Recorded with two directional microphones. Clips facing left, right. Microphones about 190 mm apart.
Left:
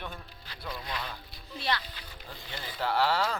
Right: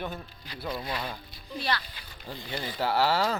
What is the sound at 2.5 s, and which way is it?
Speech, 10° right (ahead or behind).